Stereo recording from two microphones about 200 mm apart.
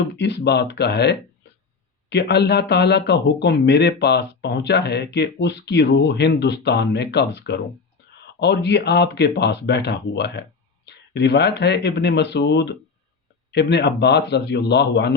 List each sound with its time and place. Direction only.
0.2 s speech: 60° left (ahead or behind)